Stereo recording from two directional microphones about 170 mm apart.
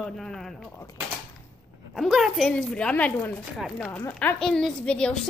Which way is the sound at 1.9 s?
Centre (ahead or behind).